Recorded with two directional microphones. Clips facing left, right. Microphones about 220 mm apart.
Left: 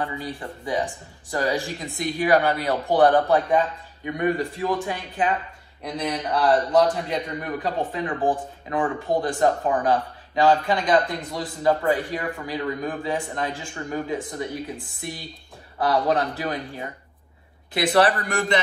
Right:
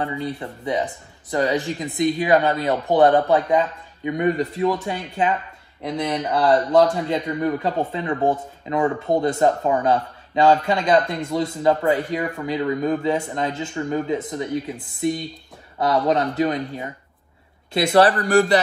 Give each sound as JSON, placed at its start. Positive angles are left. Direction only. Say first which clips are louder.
{"t": 0.0, "sound": "a man's voice", "louder": "right 4 dB", "side_deg": -25}
{"t": 15.8, "sound": "a man's voice", "louder": "right 2 dB", "side_deg": -25}